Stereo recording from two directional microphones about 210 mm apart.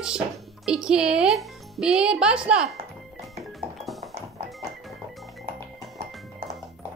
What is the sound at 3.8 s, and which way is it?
Music, centre (ahead or behind).